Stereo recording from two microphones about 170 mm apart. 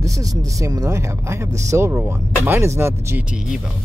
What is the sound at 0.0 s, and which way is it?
Speech, 20° right (ahead or behind).